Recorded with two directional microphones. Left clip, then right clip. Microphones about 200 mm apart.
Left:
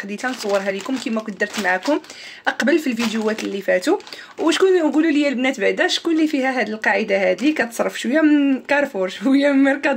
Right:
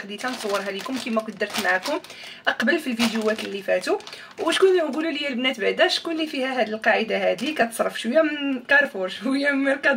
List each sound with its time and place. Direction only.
1.4 s speech: 45° left (ahead or behind)